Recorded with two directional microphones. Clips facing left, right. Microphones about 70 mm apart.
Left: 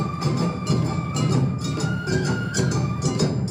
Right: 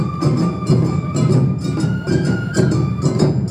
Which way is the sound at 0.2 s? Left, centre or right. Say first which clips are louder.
Right 9 dB; right.